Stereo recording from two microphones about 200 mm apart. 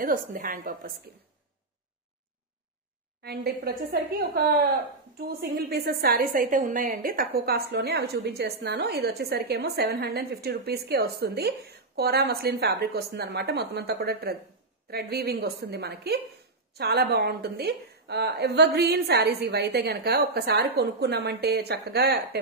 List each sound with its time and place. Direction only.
0.0 s a woman's voice: 45° right (ahead or behind)
3.2 s a woman's voice: 50° right (ahead or behind)
5.2 s a woman's voice: 50° right (ahead or behind)